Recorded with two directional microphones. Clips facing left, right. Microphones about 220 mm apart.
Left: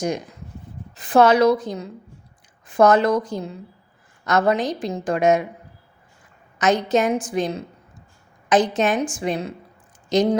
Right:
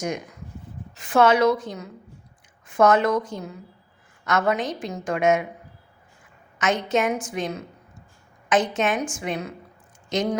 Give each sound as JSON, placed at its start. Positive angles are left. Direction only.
{"t": 0.0, "sound": "a woman's voice", "side_deg": 35}
{"t": 6.6, "sound": "a woman's voice", "side_deg": 35}